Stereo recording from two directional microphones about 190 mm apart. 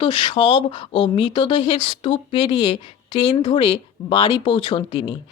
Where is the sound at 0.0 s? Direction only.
25° left (ahead or behind).